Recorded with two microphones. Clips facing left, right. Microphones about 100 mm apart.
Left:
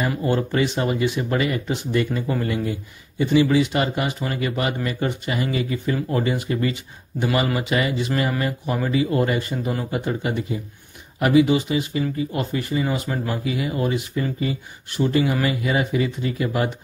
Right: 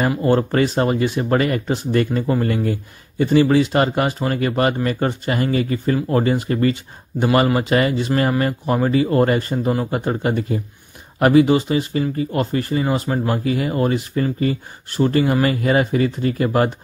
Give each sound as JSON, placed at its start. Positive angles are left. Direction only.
{"t": 0.2, "sound": "speech", "side_deg": -40}